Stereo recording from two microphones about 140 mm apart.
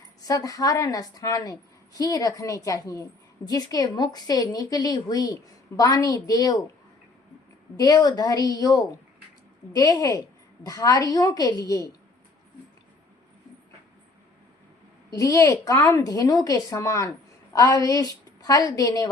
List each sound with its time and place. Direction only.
0.2 s a woman's voice: 25° left (ahead or behind)
7.8 s a woman's voice: 25° left (ahead or behind)
15.1 s a woman's voice: 20° left (ahead or behind)